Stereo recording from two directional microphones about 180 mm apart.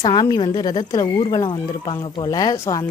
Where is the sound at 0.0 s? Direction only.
25° left (ahead or behind).